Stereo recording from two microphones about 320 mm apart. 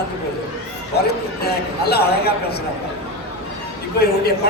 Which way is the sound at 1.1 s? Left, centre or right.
Left.